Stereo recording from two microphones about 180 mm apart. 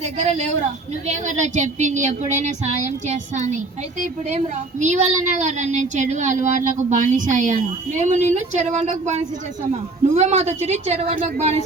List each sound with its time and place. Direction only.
0.0 s a woman's voice: 40° right (ahead or behind)